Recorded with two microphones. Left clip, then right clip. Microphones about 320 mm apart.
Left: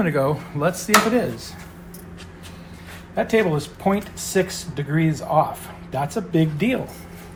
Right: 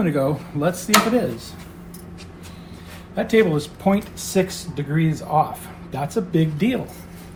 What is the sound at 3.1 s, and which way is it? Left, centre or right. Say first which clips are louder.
Speech: right 2 dB; left.